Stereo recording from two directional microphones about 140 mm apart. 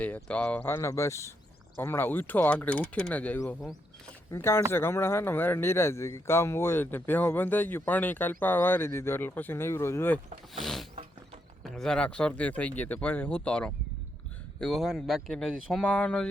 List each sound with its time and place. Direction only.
0.0 s speech: 10° left (ahead or behind)
4.3 s speech: 20° left (ahead or behind)
10.6 s speech: centre (ahead or behind)